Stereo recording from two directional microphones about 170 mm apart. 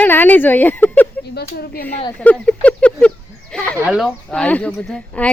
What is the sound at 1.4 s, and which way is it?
Speech, 65° left (ahead or behind).